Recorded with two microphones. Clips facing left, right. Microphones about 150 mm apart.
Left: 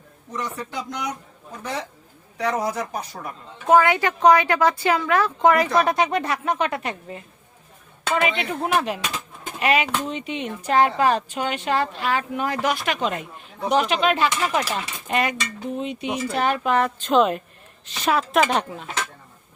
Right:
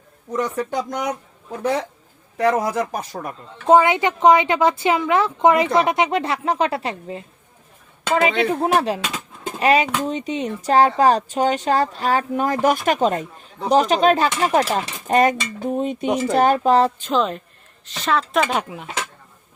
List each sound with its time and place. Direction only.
0.3 s speech: 50° right (ahead or behind)
3.7 s a woman's voice: 20° right (ahead or behind)
17.1 s speech: 5° left (ahead or behind)
17.8 s speech: 15° left (ahead or behind)
18.3 s speech: centre (ahead or behind)